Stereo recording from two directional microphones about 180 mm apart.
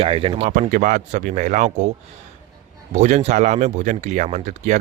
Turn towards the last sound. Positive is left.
turn(degrees=-40)  # may be behind; listen again after turning